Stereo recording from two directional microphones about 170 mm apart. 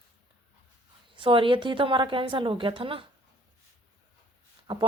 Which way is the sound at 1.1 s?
30° right (ahead or behind).